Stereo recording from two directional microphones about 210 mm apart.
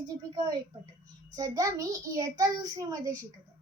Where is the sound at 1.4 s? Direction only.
15° right (ahead or behind).